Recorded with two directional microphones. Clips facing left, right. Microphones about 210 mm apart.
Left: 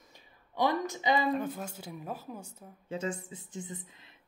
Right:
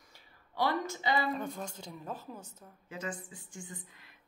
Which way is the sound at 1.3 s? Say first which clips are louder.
Left 4 dB; 5° left (ahead or behind).